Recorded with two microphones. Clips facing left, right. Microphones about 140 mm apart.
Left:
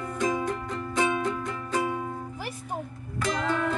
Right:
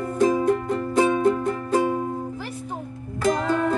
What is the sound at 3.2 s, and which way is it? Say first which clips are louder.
Music: right 6 dB; 45° right (ahead or behind).